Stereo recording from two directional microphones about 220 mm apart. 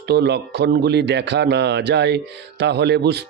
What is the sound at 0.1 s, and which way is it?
Speech, 50° right (ahead or behind).